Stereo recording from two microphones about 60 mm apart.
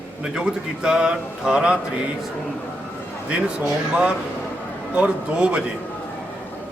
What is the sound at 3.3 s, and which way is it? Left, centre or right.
A man's voice, centre.